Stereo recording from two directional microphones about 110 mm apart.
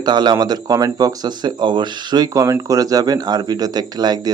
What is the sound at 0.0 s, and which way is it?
Speech, 40° right (ahead or behind).